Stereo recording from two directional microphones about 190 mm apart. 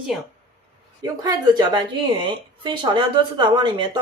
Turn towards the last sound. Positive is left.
turn(degrees=-25)  # may be behind; listen again after turning